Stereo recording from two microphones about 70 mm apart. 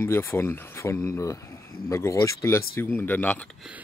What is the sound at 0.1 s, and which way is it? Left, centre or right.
Speech, left.